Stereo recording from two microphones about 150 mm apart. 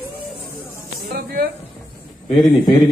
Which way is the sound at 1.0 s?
85° right.